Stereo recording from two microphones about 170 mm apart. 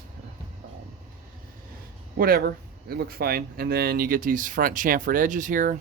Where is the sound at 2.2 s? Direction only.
60° right (ahead or behind).